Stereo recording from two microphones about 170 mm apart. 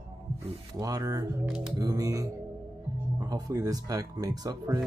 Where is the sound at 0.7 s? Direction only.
20° right (ahead or behind).